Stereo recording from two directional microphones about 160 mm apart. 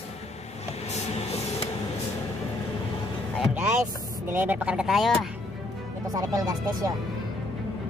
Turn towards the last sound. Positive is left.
turn(degrees=-20)  # may be behind; listen again after turning